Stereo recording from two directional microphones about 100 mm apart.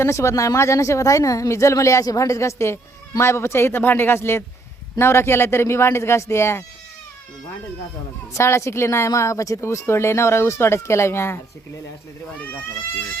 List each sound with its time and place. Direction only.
0.0 s a woman's voice: 30° left (ahead or behind)
8.3 s a woman's voice: 30° left (ahead or behind)